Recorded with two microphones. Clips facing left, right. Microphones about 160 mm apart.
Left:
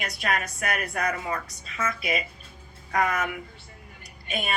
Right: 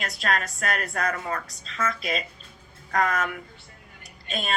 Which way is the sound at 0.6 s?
20° left (ahead or behind).